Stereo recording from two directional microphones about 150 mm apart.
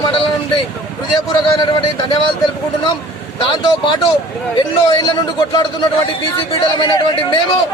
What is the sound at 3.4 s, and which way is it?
A man's voice, 35° left (ahead or behind).